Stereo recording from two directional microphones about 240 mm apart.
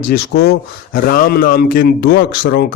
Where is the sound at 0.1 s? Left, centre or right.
Left.